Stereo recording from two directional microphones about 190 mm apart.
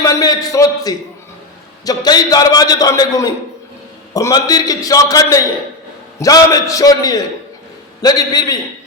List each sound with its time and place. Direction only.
0.0 s a man's voice: 20° left (ahead or behind)